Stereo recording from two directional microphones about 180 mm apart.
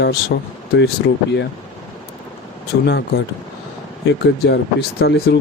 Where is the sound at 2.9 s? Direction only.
65° left (ahead or behind).